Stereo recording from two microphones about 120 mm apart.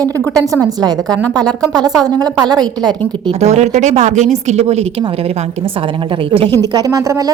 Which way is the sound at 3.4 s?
75° right (ahead or behind).